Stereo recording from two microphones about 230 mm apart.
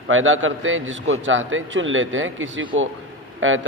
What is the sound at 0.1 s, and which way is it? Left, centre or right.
A man's voice, right.